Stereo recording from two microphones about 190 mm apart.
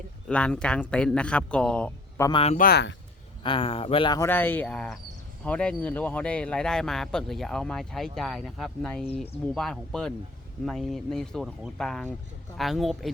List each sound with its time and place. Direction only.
0.3 s speech: 5° left (ahead or behind)
2.2 s speech: 30° left (ahead or behind)
2.6 s speech: 55° left (ahead or behind)
3.4 s speech: 30° left (ahead or behind)
4.3 s speech: 10° left (ahead or behind)